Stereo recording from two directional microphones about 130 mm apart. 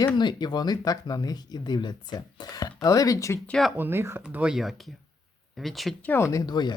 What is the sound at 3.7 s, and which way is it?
Speech, 15° right (ahead or behind).